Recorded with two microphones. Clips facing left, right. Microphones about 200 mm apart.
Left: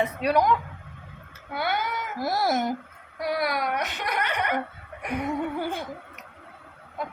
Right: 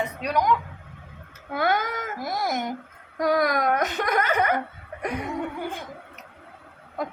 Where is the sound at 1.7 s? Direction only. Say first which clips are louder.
Right 3 dB; 90° right.